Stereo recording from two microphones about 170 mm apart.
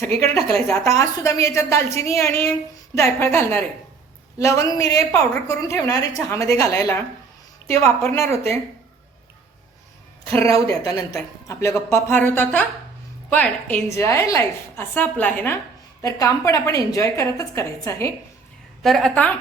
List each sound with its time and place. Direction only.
0.3 s a woman's voice: 35° right (ahead or behind)
0.9 s a woman's voice: 20° left (ahead or behind)
10.3 s speech: 20° left (ahead or behind)
16.0 s a woman's voice: 20° left (ahead or behind)
18.8 s a woman's voice: centre (ahead or behind)